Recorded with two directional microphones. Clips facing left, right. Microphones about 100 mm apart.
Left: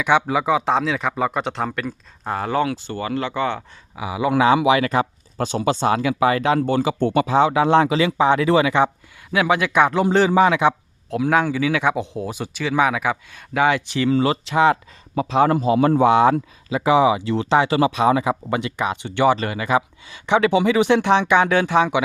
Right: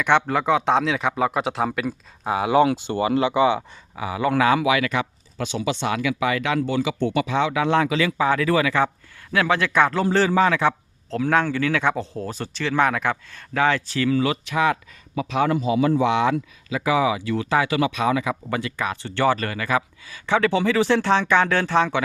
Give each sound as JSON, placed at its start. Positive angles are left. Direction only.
{"t": 0.0, "sound": "a man's voice", "side_deg": 5}
{"t": 3.9, "sound": "a man's voice", "side_deg": 10}
{"t": 4.4, "sound": "a man's voice", "side_deg": 25}
{"t": 16.6, "sound": "speech", "side_deg": 25}